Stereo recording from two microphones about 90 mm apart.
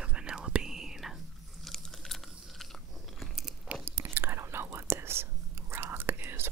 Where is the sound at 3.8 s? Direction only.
25° right (ahead or behind).